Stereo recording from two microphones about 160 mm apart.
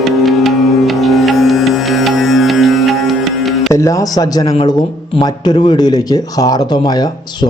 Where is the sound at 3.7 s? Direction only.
20° left (ahead or behind).